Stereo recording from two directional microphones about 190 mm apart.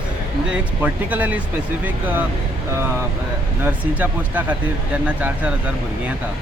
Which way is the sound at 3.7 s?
10° right (ahead or behind).